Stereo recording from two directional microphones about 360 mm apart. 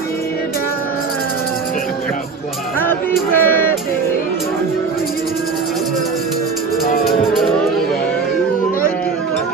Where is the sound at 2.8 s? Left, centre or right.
Centre.